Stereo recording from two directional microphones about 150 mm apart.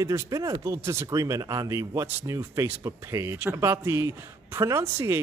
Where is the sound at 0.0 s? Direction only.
20° right (ahead or behind).